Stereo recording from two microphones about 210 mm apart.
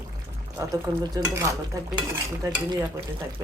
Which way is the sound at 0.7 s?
15° right (ahead or behind).